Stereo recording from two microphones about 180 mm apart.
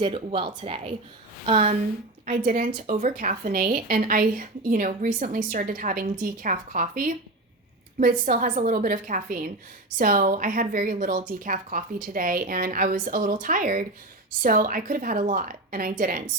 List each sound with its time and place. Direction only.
0.0 s speech: 30° right (ahead or behind)
2.2 s a woman's voice: 50° right (ahead or behind)